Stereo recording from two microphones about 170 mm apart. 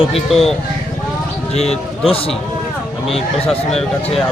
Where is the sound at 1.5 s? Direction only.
35° left (ahead or behind).